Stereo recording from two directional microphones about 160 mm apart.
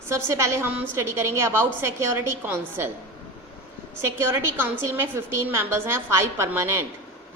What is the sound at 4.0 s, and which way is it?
A woman's voice, 15° right (ahead or behind).